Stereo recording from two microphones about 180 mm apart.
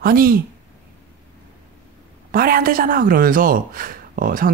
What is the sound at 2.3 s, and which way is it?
A woman's voice, 55° right (ahead or behind).